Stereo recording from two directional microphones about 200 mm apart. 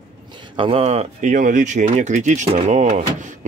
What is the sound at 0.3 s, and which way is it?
Speech, 25° right (ahead or behind).